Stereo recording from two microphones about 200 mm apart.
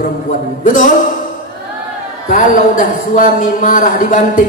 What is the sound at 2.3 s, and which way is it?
Speech, 40° left (ahead or behind).